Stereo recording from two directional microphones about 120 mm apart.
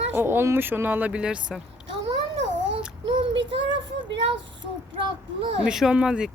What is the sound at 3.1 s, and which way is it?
Child singing, 45° right (ahead or behind).